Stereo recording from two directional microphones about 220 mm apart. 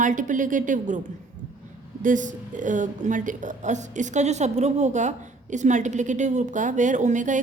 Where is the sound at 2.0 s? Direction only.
35° right (ahead or behind).